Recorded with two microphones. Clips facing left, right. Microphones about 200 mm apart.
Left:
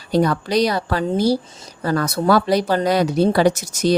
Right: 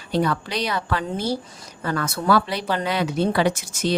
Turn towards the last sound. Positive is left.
turn(degrees=40)  # may be behind; listen again after turning